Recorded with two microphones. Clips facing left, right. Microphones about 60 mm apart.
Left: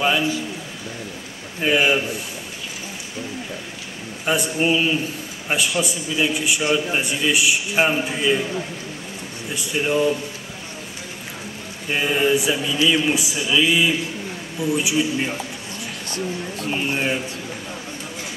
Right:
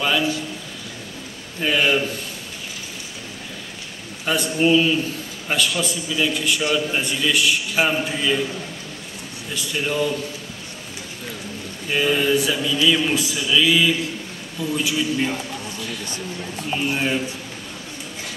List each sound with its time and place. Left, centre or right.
0.0 s speech: left
1.6 s a man's voice: centre
4.3 s a man's voice: centre
11.9 s a man's voice: left
16.6 s a man's voice: centre